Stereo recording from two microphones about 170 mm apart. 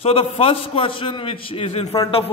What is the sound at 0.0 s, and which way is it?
Speech, 35° left (ahead or behind).